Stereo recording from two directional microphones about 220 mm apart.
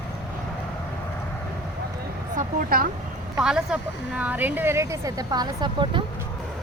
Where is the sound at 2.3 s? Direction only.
35° right (ahead or behind).